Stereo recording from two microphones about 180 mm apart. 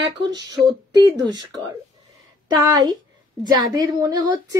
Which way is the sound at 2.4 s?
25° right (ahead or behind).